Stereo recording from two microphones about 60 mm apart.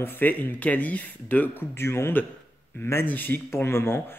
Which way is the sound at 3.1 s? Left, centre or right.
Left.